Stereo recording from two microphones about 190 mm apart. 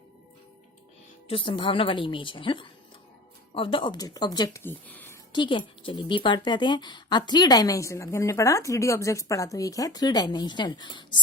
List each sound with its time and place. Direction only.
1.3 s a woman's voice: 25° left (ahead or behind); by 5.1 s 10° left (ahead or behind)
5.3 s a woman's voice: 25° left (ahead or behind)